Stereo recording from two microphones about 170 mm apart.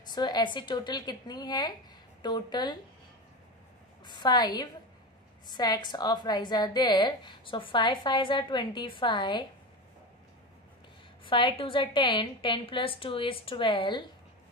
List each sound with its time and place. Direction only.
0.1 s a woman's voice: 25° left (ahead or behind)
4.0 s a woman's voice: 25° left (ahead or behind)
11.2 s a woman's voice: 30° left (ahead or behind)